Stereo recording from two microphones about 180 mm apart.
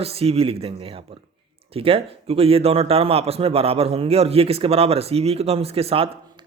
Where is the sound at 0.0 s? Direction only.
35° right (ahead or behind).